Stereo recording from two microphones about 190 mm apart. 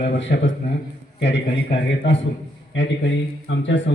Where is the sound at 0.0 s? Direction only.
65° left (ahead or behind).